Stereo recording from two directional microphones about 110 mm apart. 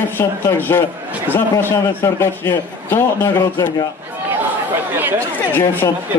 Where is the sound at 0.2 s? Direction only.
20° left (ahead or behind).